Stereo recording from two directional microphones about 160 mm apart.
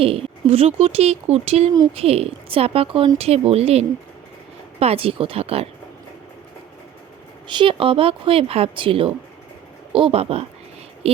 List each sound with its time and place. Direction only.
0.0 s speech: 35° right (ahead or behind)
7.4 s speech: 30° right (ahead or behind)
11.0 s a sound: 40° right (ahead or behind)